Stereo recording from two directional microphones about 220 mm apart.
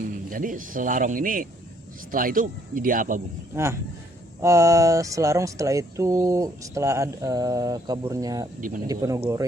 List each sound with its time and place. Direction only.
0.1 s speech: 40° right (ahead or behind)
3.5 s speech: 10° right (ahead or behind)